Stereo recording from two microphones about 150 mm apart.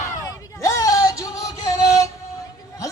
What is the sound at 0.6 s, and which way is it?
Music, 20° left (ahead or behind).